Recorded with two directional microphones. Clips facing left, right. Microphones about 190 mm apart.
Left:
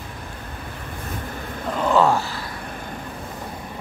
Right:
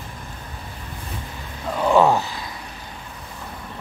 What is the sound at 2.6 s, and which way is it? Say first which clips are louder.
Vehicle: left 6 dB; 55° left (ahead or behind).